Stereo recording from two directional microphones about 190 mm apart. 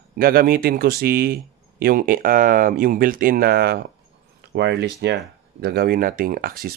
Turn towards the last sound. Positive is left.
turn(degrees=-50)  # may be behind; listen again after turning